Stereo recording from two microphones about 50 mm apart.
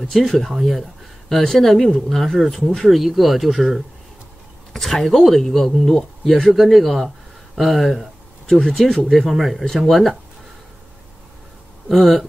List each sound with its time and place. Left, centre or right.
0.0 s speech: centre
11.9 s speech: centre